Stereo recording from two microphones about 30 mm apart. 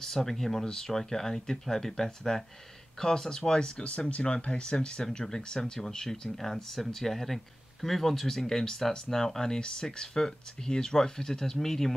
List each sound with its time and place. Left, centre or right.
0.0 s speech: centre
4.1 s speech: left
4.7 s speech: left